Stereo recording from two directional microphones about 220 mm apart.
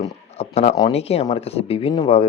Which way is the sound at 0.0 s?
30° left (ahead or behind).